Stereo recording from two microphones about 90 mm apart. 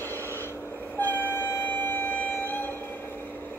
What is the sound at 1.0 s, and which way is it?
Train, 20° left (ahead or behind).